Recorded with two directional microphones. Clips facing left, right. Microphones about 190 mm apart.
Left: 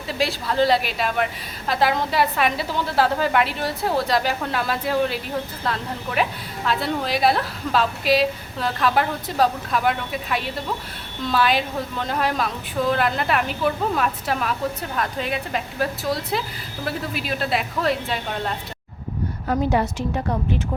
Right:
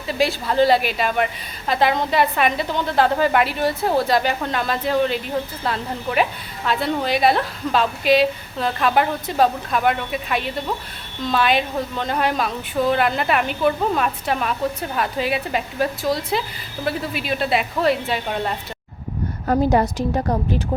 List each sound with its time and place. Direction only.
0.1 s a woman's voice: centre (ahead or behind)
19.5 s a woman's voice: 40° right (ahead or behind)